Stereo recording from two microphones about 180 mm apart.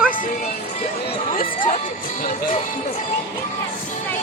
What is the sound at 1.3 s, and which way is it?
Speech, 45° left (ahead or behind).